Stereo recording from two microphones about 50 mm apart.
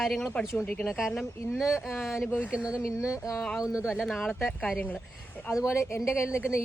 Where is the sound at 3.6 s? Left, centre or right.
Centre.